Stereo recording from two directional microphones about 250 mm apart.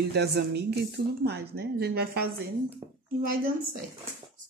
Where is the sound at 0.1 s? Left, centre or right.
Right.